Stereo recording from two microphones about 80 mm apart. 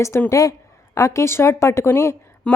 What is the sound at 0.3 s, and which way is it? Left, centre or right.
A woman's voice, left.